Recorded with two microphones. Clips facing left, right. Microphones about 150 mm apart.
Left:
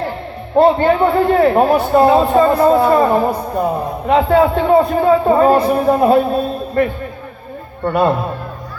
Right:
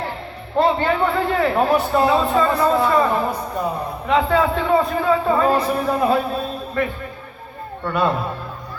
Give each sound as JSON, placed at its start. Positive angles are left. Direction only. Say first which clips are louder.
{"t": 0.5, "sound": "a man's voice", "louder": "left 7 dB", "side_deg": 40}
{"t": 4.0, "sound": "a man's voice", "louder": "left 5 dB", "side_deg": 35}
{"t": 7.9, "sound": "a man's voice", "louder": "left 6 dB", "side_deg": 40}